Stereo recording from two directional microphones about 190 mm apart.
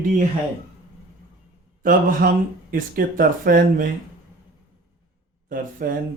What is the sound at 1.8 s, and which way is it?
Speech, 45° right (ahead or behind).